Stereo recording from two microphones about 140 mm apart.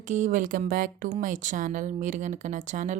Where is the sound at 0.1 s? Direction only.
65° right (ahead or behind).